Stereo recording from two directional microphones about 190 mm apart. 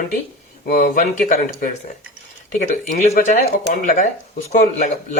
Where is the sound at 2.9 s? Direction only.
35° left (ahead or behind).